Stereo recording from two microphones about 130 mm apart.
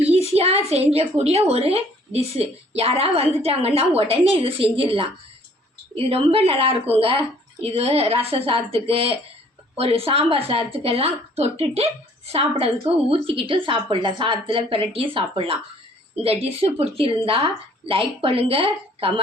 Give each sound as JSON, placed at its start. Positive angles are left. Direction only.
{"t": 0.0, "sound": "a woman's voice", "side_deg": -55}
{"t": 6.1, "sound": "a woman's voice", "side_deg": -50}